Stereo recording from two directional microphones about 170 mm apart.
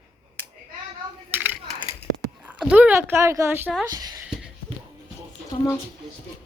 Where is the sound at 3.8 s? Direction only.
25° right (ahead or behind).